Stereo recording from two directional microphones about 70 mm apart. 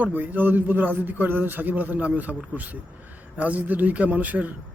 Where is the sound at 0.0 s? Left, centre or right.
Right.